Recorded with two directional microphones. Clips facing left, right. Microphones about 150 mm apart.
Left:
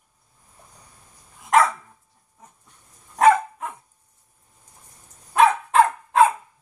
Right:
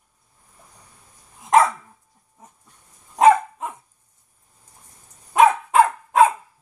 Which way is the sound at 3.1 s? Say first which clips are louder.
Right 2 dB; 20° right (ahead or behind).